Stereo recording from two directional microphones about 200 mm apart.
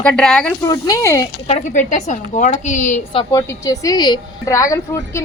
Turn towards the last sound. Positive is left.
turn(degrees=15)  # may be behind; listen again after turning